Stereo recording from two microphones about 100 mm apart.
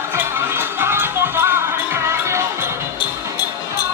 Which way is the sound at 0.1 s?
25° right (ahead or behind).